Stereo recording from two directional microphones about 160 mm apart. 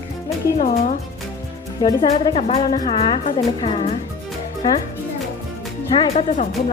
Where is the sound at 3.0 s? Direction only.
35° left (ahead or behind).